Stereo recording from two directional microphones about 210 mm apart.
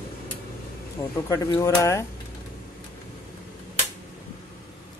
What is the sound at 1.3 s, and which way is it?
Speech, 15° left (ahead or behind).